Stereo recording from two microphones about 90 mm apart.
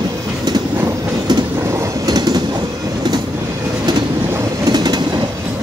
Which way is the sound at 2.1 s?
50° right (ahead or behind).